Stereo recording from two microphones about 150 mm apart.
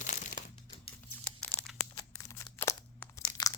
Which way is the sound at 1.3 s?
5° left (ahead or behind).